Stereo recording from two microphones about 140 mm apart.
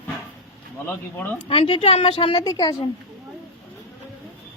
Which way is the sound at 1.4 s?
40° left (ahead or behind).